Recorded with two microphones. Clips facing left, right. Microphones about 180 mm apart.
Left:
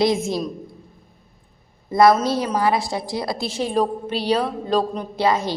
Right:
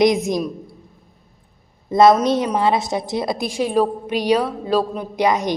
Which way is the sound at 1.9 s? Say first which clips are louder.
Right 2 dB; 20° right (ahead or behind).